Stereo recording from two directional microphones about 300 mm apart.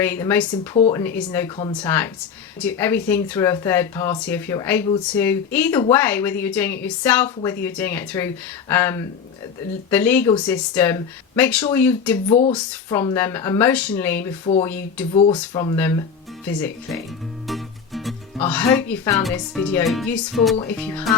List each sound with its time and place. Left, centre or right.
0.0 s speech: centre
12.3 s speech: centre
14.4 s speech: centre
14.7 s speech: centre
15.1 s speech: centre
17.4 s music: centre
18.3 s speech: centre